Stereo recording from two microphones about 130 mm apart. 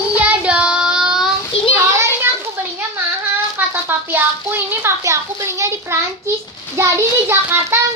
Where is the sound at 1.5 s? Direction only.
45° left (ahead or behind).